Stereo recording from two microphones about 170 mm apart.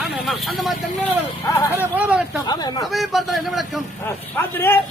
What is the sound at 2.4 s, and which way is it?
Speech, 25° left (ahead or behind).